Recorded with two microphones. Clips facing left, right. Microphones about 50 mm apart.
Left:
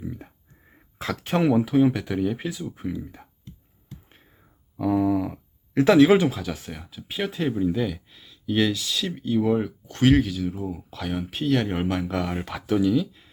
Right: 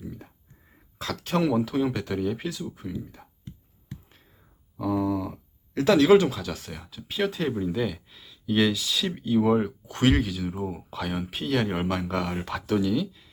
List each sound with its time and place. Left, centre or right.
0.0 s a sound: centre
0.9 s speech: left
4.8 s speech: left; by 10.6 s centre
10.6 s speech: centre
10.9 s speech: centre